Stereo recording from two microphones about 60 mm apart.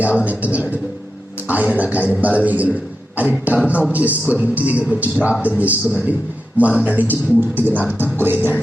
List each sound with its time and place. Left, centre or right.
0.0 s speech: right
8.2 s music: right